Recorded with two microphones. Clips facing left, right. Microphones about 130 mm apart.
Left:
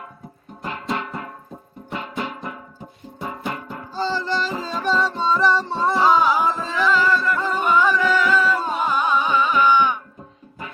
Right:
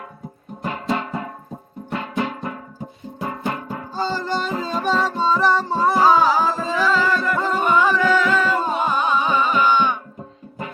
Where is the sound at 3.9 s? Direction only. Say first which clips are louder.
Even; 50° right (ahead or behind).